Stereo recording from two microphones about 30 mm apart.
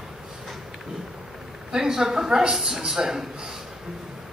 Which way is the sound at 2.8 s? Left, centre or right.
Centre.